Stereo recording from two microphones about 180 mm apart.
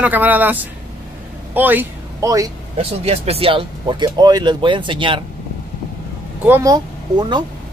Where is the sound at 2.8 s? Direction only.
35° right (ahead or behind).